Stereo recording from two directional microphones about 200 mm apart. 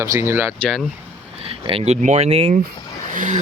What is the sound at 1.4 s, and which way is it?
Speech, 30° right (ahead or behind).